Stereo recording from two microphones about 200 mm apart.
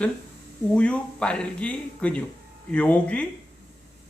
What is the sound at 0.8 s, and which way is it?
Speech, 5° left (ahead or behind).